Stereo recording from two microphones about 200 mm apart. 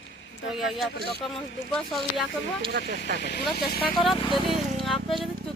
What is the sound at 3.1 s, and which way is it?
Speech, 55° left (ahead or behind).